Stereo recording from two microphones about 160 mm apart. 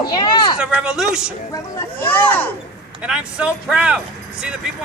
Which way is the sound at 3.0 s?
5° right (ahead or behind).